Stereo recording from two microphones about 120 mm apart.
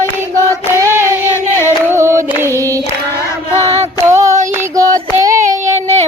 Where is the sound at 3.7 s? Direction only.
60° right (ahead or behind).